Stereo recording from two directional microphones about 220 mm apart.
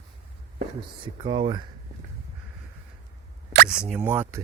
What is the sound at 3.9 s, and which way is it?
Speech, 10° right (ahead or behind).